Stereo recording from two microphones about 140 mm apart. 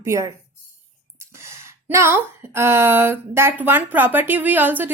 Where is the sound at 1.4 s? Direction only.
20° right (ahead or behind).